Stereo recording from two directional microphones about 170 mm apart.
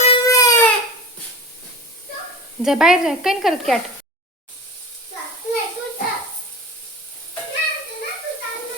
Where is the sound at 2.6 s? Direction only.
5° right (ahead or behind).